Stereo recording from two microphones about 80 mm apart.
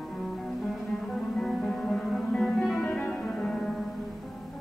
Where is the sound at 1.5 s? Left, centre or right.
Centre.